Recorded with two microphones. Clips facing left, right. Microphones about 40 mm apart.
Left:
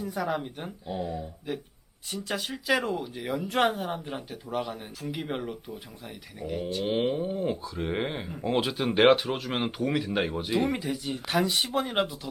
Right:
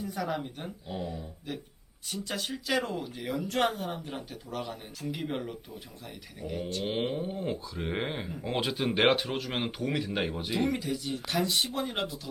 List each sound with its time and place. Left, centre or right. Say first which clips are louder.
0.0 s speech: left 3 dB; centre
10.7 s speech: left 1 dB; centre